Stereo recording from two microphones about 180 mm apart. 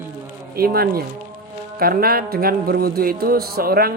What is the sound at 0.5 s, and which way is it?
A man's voice, 55° right (ahead or behind).